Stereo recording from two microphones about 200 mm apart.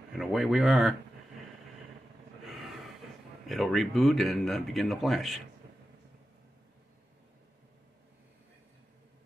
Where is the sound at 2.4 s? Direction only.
Centre (ahead or behind).